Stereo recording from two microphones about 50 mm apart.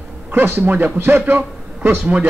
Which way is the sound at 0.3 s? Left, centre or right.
Right.